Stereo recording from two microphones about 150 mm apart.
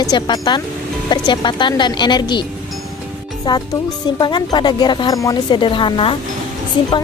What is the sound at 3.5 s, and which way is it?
A woman's voice, 30° left (ahead or behind).